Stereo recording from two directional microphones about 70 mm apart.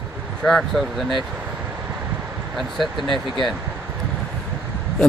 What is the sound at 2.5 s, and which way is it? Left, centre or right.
Speech, centre.